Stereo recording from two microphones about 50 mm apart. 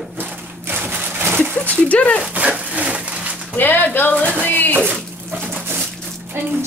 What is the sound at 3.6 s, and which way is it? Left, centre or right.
Speech, left.